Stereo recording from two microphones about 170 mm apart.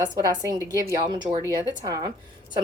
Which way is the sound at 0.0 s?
25° right (ahead or behind).